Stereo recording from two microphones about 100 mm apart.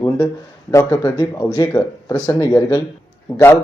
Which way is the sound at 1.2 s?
10° left (ahead or behind).